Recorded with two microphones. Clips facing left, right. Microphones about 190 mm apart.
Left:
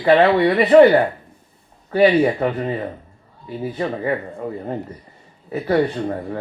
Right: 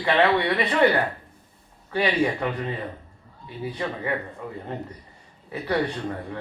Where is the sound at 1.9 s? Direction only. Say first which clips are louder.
Left 9 dB; 40° left (ahead or behind).